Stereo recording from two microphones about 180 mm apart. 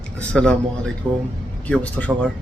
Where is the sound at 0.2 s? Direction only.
5° left (ahead or behind).